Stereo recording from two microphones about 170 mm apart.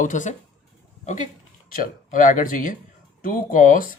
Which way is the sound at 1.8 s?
55° left (ahead or behind).